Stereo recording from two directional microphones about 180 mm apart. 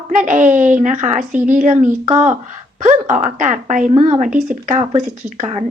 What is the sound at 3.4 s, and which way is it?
A woman's voice, 45° right (ahead or behind).